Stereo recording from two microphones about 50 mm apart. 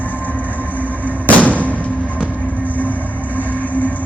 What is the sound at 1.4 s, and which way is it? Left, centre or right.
Music, left.